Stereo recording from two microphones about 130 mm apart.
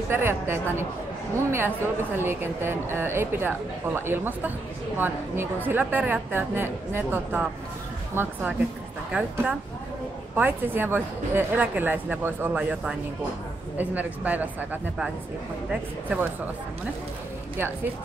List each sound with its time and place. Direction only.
0.1 s speech: 20° right (ahead or behind)